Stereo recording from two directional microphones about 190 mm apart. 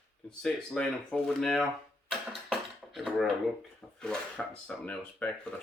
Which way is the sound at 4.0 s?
5° left (ahead or behind).